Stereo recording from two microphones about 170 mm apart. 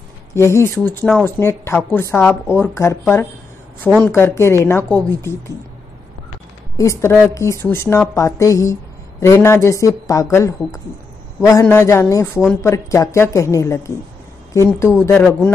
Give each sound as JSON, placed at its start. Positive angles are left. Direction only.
{"t": 0.3, "sound": "speech", "side_deg": 15}
{"t": 6.8, "sound": "speech", "side_deg": 15}